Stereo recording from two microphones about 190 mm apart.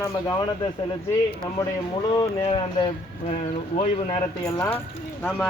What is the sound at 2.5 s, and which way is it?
Speech, 25° left (ahead or behind).